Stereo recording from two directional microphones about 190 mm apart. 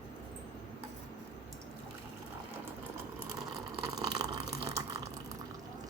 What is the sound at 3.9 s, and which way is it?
Water, 20° right (ahead or behind).